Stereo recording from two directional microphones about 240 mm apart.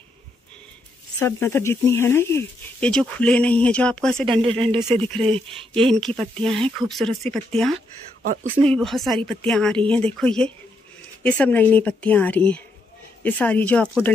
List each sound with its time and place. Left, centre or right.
1.2 s speech: centre
4.3 s speech: right
5.0 s speech: centre